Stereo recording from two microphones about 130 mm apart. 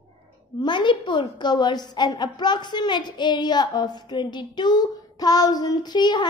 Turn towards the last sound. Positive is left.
turn(degrees=35)  # may be behind; listen again after turning